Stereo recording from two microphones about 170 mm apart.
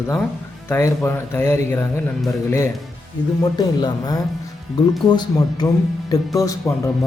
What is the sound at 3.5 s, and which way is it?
A man's voice, 25° left (ahead or behind).